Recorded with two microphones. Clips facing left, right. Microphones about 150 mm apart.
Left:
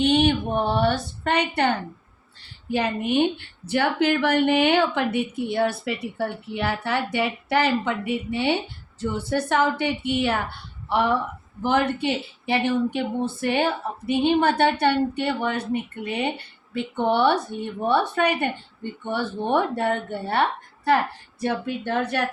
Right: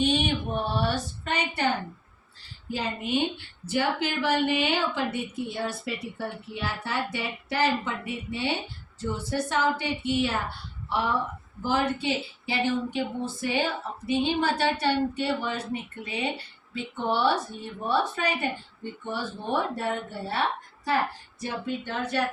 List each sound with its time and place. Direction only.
0.0 s a woman's voice: 60° left (ahead or behind)
2.7 s a woman's voice: 60° left (ahead or behind)
21.4 s a woman's voice: 60° left (ahead or behind)